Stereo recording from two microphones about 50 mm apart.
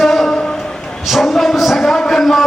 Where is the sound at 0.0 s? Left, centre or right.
Centre.